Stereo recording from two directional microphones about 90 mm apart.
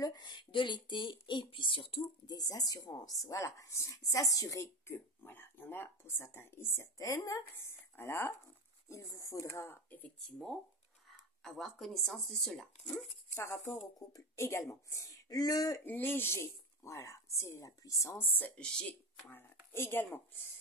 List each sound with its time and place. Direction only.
0.0 s speech: 50° left (ahead or behind); by 2.0 s 85° left
2.2 s speech: 45° left (ahead or behind)
4.8 s speech: 25° left (ahead or behind)
9.8 s speech: 20° left (ahead or behind)
10.1 s speech: 5° left (ahead or behind)
13.3 s speech: 35° left (ahead or behind)
15.8 s speech: 25° left (ahead or behind)
18.2 s speech: 20° left (ahead or behind)
19.3 s speech: 25° left (ahead or behind)